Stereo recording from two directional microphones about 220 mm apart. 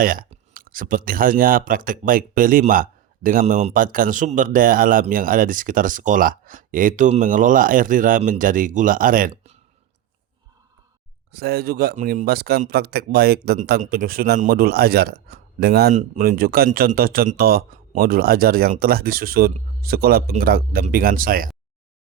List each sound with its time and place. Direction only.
0.0 s speech: 40° right (ahead or behind)
11.3 s speech: 45° right (ahead or behind)